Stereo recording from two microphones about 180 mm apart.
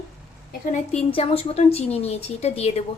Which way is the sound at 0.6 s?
40° left (ahead or behind).